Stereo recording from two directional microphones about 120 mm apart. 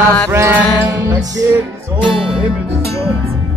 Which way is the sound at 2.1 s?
Centre (ahead or behind).